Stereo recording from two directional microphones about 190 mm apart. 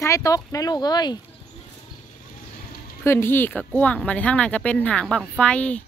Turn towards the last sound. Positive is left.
turn(degrees=5)  # may be behind; listen again after turning